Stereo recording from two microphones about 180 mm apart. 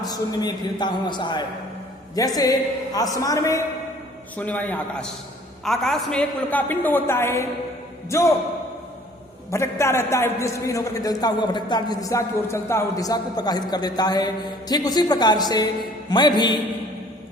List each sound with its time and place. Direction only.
0.0 s a man's voice: 20° left (ahead or behind)
9.5 s a man's voice: 15° left (ahead or behind)